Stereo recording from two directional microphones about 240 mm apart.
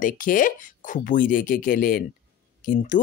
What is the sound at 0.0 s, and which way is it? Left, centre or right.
Speech, left.